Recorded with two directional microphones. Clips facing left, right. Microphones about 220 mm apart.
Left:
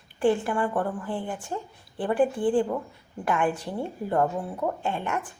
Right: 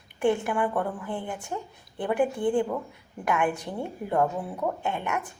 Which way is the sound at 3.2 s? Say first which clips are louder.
Left 1 dB; 10° right (ahead or behind).